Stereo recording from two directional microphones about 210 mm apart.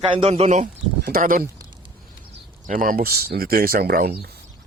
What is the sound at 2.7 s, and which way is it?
A man's voice, 40° right (ahead or behind).